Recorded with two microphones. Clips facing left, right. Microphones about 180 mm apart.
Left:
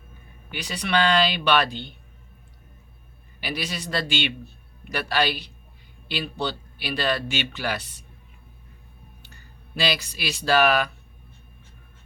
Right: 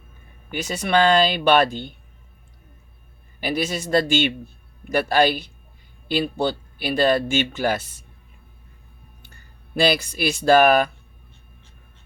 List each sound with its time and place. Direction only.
0.5 s speech: 45° right (ahead or behind)
3.4 s speech: 45° right (ahead or behind)
9.7 s speech: 50° right (ahead or behind)